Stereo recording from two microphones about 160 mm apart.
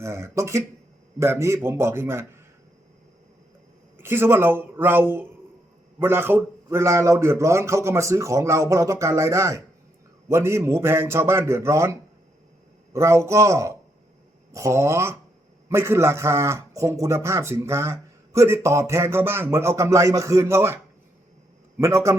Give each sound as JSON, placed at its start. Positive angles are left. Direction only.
{"t": 0.0, "sound": "a man's voice", "side_deg": -15}
{"t": 3.9, "sound": "a man's voice", "side_deg": -15}
{"t": 21.8, "sound": "a man's voice", "side_deg": -20}